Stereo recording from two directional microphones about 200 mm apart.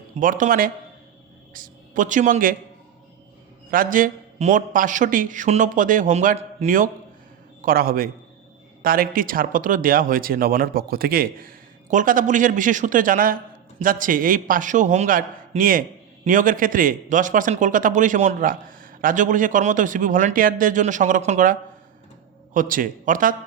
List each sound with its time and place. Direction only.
0.2 s a man's voice: 40° right (ahead or behind)
3.7 s speech: 45° right (ahead or behind)